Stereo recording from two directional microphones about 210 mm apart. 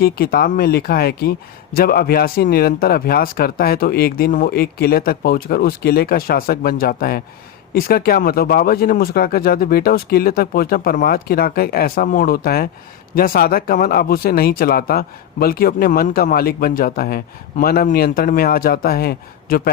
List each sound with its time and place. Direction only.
0.0 s speech: 45° left (ahead or behind)